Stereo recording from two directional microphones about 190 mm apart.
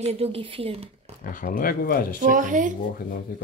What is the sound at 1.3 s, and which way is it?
Speech, 45° left (ahead or behind).